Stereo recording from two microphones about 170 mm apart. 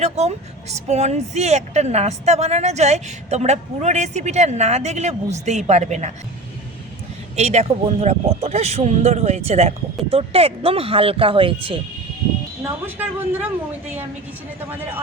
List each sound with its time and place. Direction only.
0.0 s speech: 40° right (ahead or behind)
7.3 s speech: 40° right (ahead or behind)
12.6 s speech: 10° right (ahead or behind)